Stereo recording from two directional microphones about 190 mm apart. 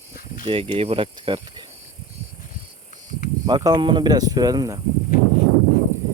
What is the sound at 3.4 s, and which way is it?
Speech, 20° right (ahead or behind).